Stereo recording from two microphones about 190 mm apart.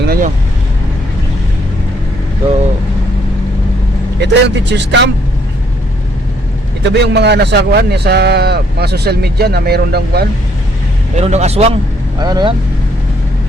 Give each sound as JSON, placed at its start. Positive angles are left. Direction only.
{"t": 0.0, "sound": "vehicle", "side_deg": -50}
{"t": 4.2, "sound": "speech", "side_deg": -65}
{"t": 6.8, "sound": "speech", "side_deg": -65}
{"t": 11.2, "sound": "speech", "side_deg": -35}
{"t": 12.2, "sound": "speech", "side_deg": -20}